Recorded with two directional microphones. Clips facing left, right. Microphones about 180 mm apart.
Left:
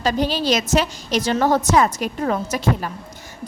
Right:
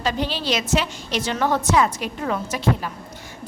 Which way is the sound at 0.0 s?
40° left (ahead or behind).